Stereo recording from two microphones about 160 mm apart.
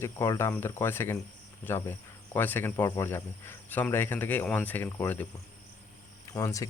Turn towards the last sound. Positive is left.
turn(degrees=20)  # may be behind; listen again after turning